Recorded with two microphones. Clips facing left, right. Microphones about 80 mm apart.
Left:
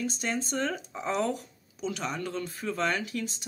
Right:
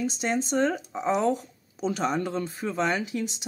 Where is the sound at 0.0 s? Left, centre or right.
Centre.